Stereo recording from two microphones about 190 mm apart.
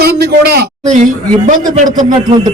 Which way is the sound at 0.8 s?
40° right (ahead or behind).